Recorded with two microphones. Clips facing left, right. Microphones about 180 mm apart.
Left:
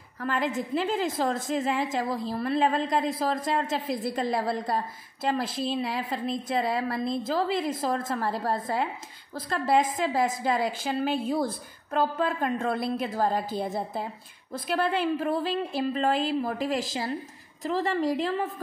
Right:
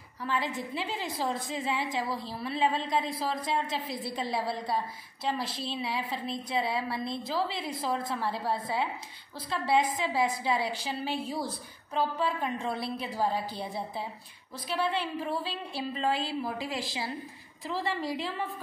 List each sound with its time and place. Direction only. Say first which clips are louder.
0.2 s a woman's voice: left 4 dB; 50° left (ahead or behind)